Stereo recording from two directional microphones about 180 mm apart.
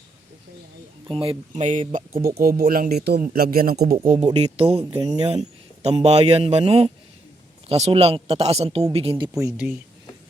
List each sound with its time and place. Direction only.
1.0 s speech: 30° right (ahead or behind); by 4.2 s 50° right (ahead or behind)
4.2 s speech: 35° right (ahead or behind)
9.6 s speech: 40° left (ahead or behind)